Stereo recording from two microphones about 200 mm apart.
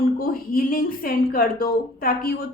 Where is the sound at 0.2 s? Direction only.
45° left (ahead or behind).